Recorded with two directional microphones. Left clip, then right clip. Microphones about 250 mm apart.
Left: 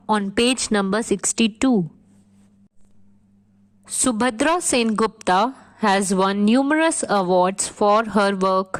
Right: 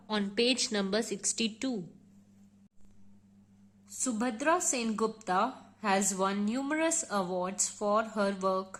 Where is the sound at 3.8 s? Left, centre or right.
Left.